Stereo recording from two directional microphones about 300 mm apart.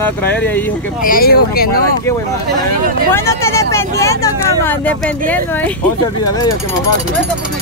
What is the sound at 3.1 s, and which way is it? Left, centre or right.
Speech, centre.